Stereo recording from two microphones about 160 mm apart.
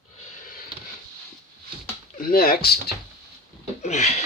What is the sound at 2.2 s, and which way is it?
Speech, 65° left (ahead or behind).